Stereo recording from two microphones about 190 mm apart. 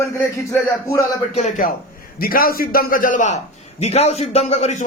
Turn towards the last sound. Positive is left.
turn(degrees=35)  # may be behind; listen again after turning